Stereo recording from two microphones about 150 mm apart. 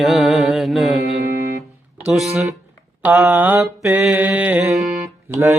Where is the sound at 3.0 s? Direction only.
5° right (ahead or behind).